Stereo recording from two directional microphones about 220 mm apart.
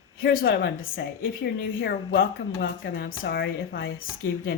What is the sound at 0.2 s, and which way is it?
Speech, 40° left (ahead or behind).